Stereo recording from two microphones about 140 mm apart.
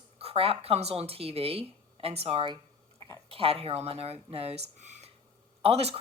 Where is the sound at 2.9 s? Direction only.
20° left (ahead or behind).